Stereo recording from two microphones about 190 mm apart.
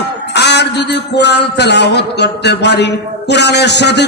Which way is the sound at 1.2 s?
60° left (ahead or behind).